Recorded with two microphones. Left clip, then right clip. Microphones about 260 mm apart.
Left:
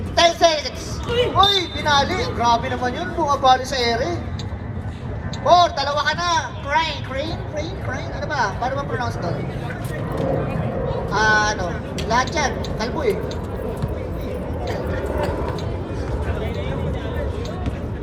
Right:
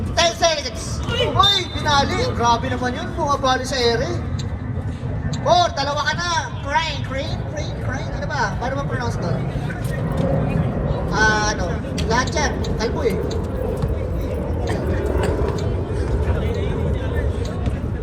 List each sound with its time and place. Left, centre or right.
0.2 s a sound: left
1.4 s speech: left
5.5 s speech: left
8.3 s speech: left
11.1 s speech: left